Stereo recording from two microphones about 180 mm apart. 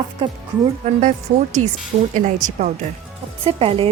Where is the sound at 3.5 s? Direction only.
30° right (ahead or behind).